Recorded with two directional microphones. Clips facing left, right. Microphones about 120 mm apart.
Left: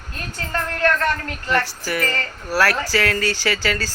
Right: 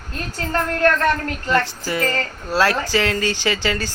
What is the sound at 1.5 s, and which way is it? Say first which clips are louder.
A woman's voice: right 1 dB; 20° right (ahead or behind).